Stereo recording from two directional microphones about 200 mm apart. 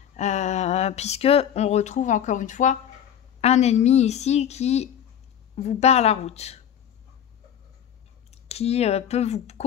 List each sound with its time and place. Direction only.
0.1 s a woman's voice: 35° left (ahead or behind)
8.3 s speech: 30° left (ahead or behind)